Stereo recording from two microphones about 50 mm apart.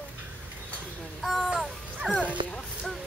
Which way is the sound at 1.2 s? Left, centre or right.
Centre.